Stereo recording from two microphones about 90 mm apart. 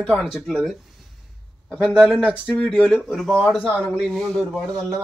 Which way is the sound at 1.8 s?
15° right (ahead or behind).